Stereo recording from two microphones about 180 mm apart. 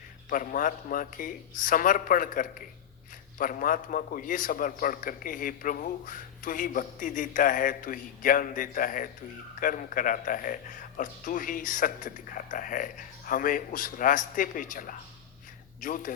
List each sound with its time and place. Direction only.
0.3 s a man's voice: 50° left (ahead or behind)